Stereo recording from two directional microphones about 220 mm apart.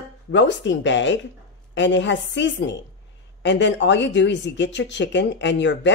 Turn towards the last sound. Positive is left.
turn(degrees=55)  # may be behind; listen again after turning